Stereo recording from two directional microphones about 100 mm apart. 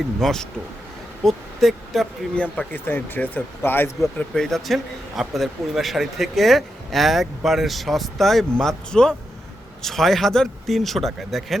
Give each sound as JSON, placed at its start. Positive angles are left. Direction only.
{"t": 0.2, "sound": "a man's voice", "side_deg": 5}
{"t": 2.3, "sound": "speech", "side_deg": 10}
{"t": 4.0, "sound": "a man's voice", "side_deg": 0}